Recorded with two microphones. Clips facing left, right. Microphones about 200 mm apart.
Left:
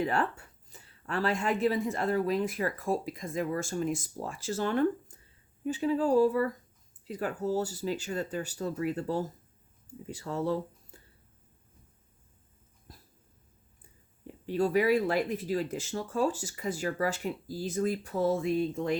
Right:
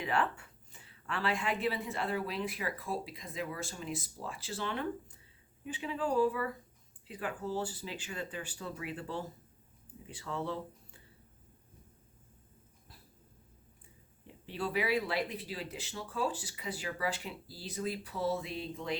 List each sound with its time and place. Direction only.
0.0 s speech: 40° left (ahead or behind)
12.9 s dog: 45° left (ahead or behind)
14.4 s speech: 45° left (ahead or behind)